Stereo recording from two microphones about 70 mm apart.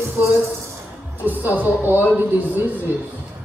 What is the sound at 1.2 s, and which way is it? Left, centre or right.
A woman's voice, right.